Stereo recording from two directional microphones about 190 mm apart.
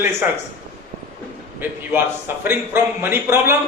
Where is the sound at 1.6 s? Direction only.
10° right (ahead or behind).